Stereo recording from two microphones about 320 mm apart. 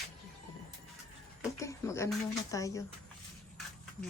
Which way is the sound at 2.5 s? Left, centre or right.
Centre.